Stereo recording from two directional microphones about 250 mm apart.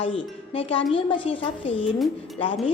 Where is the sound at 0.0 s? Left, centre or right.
Left.